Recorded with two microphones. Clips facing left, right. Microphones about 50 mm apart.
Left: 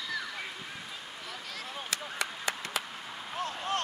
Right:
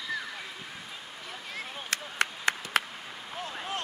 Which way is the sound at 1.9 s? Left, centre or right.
Right.